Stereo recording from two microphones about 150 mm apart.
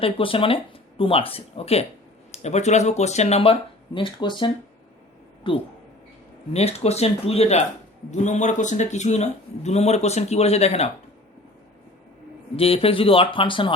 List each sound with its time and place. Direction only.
0.0 s a man's voice: 35° left (ahead or behind)
12.5 s speech: 40° left (ahead or behind)